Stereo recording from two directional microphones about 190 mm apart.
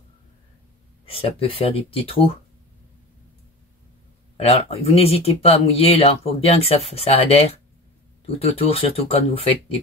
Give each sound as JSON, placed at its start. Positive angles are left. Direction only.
{"t": 1.0, "sound": "speech", "side_deg": 30}
{"t": 4.4, "sound": "speech", "side_deg": 30}